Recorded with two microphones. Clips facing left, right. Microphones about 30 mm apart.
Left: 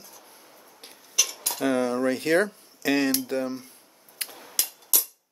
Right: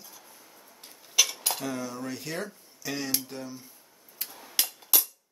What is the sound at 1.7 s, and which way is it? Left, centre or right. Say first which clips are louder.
Speech: left 10 dB; left.